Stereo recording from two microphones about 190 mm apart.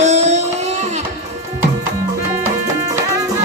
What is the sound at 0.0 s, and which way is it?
Music, 35° right (ahead or behind).